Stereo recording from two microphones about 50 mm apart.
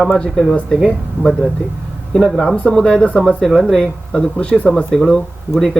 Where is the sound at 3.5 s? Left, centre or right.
Centre; by 4.7 s left.